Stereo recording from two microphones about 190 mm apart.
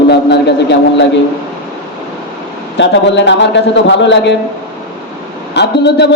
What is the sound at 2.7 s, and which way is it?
A man's voice, 70° left (ahead or behind).